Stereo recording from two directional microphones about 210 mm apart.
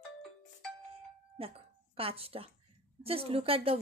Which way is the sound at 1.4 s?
25° right (ahead or behind).